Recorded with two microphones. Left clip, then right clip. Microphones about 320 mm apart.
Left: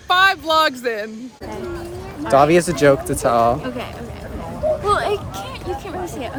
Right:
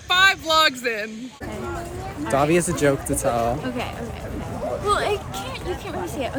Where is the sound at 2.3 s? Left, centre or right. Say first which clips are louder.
Left 7 dB; left.